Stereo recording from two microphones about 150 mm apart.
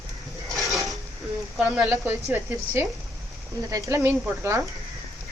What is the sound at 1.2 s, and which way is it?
Speech, centre (ahead or behind).